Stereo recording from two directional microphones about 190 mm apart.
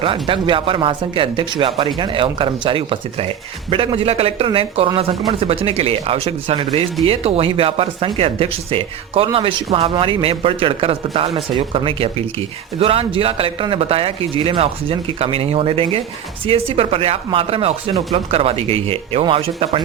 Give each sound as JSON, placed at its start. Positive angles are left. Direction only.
{"t": 0.0, "sound": "speech", "side_deg": -25}